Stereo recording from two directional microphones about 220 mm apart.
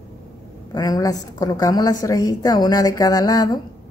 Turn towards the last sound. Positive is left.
turn(degrees=15)  # may be behind; listen again after turning